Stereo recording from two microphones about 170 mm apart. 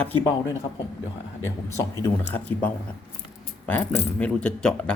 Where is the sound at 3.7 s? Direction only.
10° left (ahead or behind).